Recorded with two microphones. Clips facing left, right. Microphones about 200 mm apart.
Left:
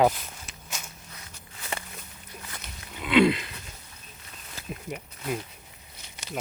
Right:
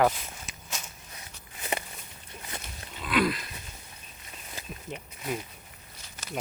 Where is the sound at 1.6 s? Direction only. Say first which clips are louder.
Right 3 dB; 20° right (ahead or behind).